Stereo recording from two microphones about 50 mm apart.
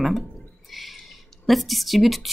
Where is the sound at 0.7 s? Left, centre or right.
Centre.